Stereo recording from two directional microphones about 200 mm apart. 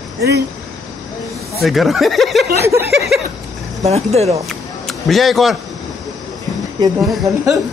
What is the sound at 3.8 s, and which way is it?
Speech, 30° right (ahead or behind).